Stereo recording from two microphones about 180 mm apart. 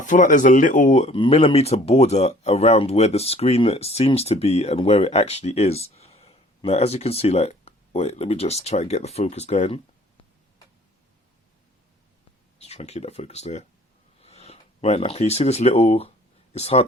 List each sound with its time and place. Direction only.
0.0 s speech: 45° left (ahead or behind)
12.5 s speech: 35° left (ahead or behind)
14.2 s a sound: 35° left (ahead or behind)